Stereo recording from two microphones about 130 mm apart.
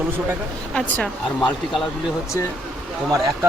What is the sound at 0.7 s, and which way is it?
Speech, 10° left (ahead or behind).